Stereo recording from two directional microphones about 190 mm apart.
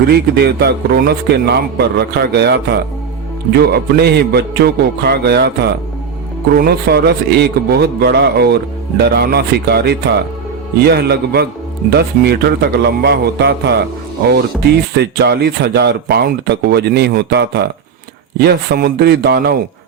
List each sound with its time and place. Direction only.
0.1 s a man's voice: 55° right (ahead or behind)
14.9 s a man's voice: 60° right (ahead or behind)